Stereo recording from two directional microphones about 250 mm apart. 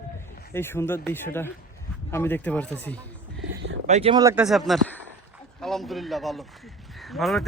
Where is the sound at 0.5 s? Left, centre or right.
Centre.